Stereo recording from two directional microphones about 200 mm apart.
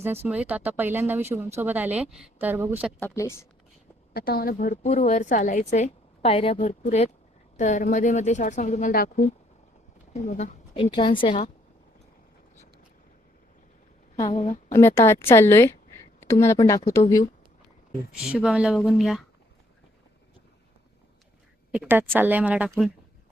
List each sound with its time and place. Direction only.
0.0 s speech: 10° right (ahead or behind)
3.0 s speech: 15° left (ahead or behind)
4.1 s a woman's voice: 50° left (ahead or behind)
10.1 s speech: 35° left (ahead or behind)
10.9 s a woman's voice: 25° left (ahead or behind)
14.3 s a woman's voice: 35° left (ahead or behind)
14.7 s speech: 15° left (ahead or behind)
18.2 s speech: 5° right (ahead or behind)
21.7 s speech: 10° right (ahead or behind)